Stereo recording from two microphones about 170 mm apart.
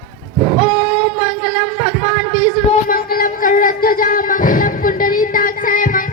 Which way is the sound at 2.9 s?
55° left (ahead or behind).